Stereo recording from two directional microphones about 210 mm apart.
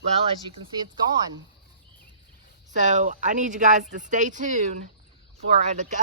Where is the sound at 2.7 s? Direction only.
35° right (ahead or behind).